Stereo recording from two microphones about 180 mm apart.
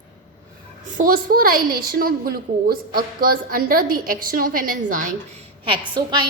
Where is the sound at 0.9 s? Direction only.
50° right (ahead or behind).